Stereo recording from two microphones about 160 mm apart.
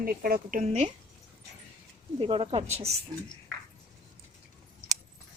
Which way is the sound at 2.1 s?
35° right (ahead or behind).